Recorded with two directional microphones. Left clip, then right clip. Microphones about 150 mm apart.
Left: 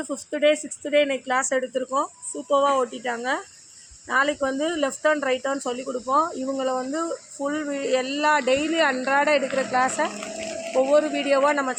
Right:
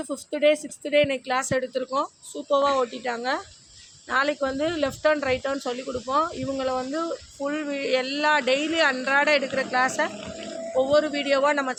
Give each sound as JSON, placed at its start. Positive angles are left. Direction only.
{"t": 0.0, "sound": "a man's voice", "side_deg": 30}